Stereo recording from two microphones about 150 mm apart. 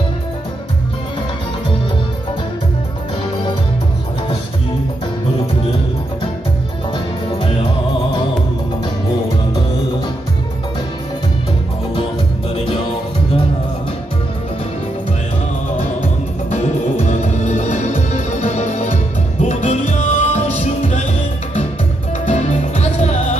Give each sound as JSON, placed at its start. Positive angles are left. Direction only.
{"t": 16.4, "sound": "music", "side_deg": 50}
{"t": 22.2, "sound": "music", "side_deg": 50}